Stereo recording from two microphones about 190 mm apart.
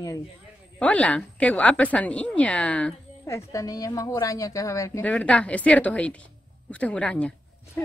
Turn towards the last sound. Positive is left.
turn(degrees=5)  # may be behind; listen again after turning